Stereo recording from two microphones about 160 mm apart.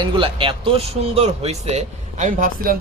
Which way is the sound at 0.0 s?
30° right (ahead or behind).